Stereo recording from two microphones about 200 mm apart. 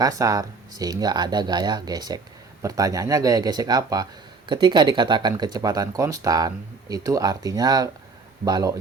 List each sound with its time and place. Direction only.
0.0 s speech: 15° right (ahead or behind)